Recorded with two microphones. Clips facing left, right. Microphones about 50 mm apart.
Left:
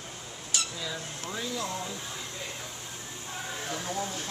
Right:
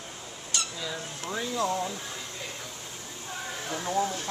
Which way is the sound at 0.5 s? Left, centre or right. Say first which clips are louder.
Right 1 dB; centre.